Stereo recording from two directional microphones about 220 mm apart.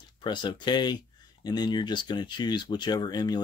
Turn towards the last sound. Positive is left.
turn(degrees=20)  # may be behind; listen again after turning